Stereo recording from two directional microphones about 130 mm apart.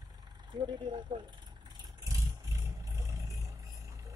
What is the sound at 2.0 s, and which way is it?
Vehicle, 25° right (ahead or behind).